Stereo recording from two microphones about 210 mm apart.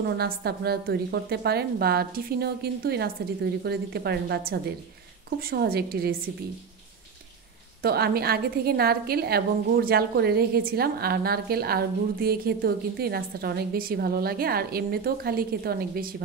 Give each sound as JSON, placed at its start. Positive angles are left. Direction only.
{"t": 0.0, "sound": "a woman's voice", "side_deg": -50}
{"t": 5.4, "sound": "a woman's voice", "side_deg": -45}
{"t": 7.8, "sound": "a woman's voice", "side_deg": -50}